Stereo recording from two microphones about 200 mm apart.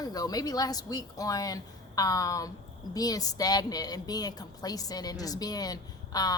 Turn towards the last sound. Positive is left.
turn(degrees=20)  # may be behind; listen again after turning